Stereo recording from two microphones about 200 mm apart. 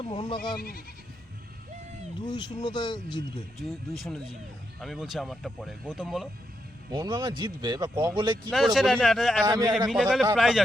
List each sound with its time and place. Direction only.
0.0 s speech: 25° left (ahead or behind)
0.5 s speech: 50° left (ahead or behind)
2.2 s speech: 20° left (ahead or behind)
3.6 s speech: centre (ahead or behind)
6.9 s speech: 20° right (ahead or behind)
8.4 s speech: centre (ahead or behind)
9.5 s speech: 20° right (ahead or behind)
9.9 s speech: centre (ahead or behind)